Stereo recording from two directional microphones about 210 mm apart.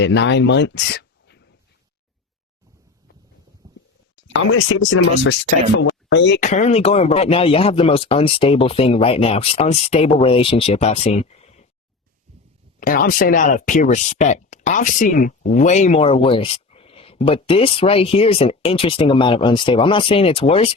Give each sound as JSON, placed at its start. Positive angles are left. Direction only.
{"t": 0.0, "sound": "speech", "side_deg": 55}
{"t": 3.6, "sound": "whispering", "side_deg": -15}
{"t": 4.3, "sound": "speech", "side_deg": 70}
{"t": 6.4, "sound": "speech", "side_deg": 35}
{"t": 12.8, "sound": "speech", "side_deg": 40}